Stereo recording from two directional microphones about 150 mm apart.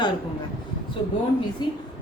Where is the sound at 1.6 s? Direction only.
30° left (ahead or behind).